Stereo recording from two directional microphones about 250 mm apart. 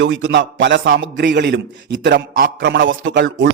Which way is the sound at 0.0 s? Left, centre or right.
Right.